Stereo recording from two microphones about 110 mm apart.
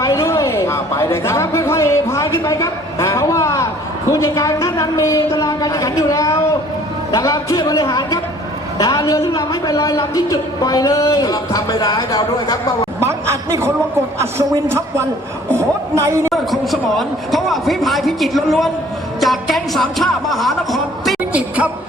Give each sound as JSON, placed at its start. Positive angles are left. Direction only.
{"t": 0.0, "sound": "a sound", "side_deg": 25}
{"t": 4.1, "sound": "a man's voice", "side_deg": 30}
{"t": 13.0, "sound": "a sound", "side_deg": -25}
{"t": 14.2, "sound": "a man's voice", "side_deg": -25}
{"t": 16.3, "sound": "a man's voice", "side_deg": 0}
{"t": 21.3, "sound": "speech", "side_deg": -10}